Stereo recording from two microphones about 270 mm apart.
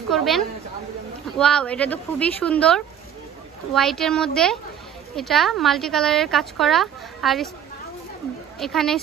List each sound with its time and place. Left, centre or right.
0.1 s speech: centre
8.5 s speech: centre